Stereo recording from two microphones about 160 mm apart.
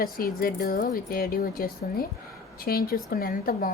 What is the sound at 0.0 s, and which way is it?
A woman's voice, 65° left (ahead or behind).